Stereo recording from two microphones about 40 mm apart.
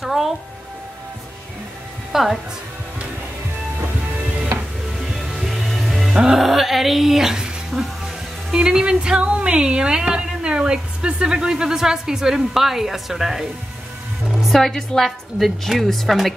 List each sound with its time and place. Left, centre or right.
0.0 s speech: centre
2.1 s a woman's voice: centre
5.1 s music: centre
6.3 s speech: centre
8.5 s speech: right; by 13.5 s centre
14.4 s a woman's voice: centre